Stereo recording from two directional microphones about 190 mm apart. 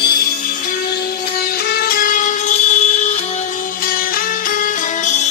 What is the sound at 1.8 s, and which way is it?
Music, 50° left (ahead or behind).